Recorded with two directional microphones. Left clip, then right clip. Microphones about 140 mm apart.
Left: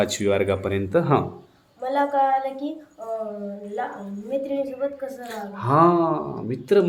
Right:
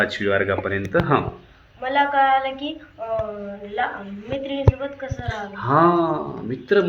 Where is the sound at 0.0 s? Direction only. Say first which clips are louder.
Right 1 dB; 40° left (ahead or behind).